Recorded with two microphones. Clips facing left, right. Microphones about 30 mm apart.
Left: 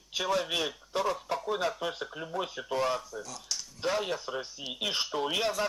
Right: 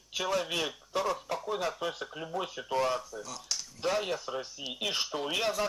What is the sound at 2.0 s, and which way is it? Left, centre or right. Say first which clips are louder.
Speech: left 1 dB; centre.